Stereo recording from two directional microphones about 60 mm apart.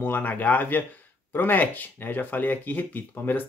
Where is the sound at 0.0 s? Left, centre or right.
Left.